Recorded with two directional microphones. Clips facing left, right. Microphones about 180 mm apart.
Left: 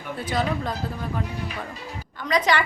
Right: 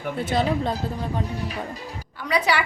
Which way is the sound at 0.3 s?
25° right (ahead or behind).